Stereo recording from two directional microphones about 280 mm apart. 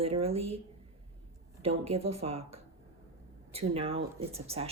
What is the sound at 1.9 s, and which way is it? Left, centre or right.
Speech, right.